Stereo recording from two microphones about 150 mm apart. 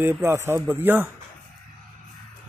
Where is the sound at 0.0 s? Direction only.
15° right (ahead or behind).